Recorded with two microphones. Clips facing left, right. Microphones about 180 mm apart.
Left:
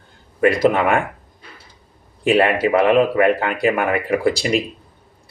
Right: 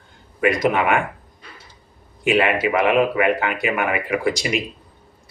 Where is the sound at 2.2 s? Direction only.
35° left (ahead or behind).